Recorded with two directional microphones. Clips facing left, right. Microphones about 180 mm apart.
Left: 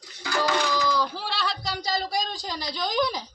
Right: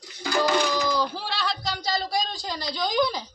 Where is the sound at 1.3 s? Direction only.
5° left (ahead or behind).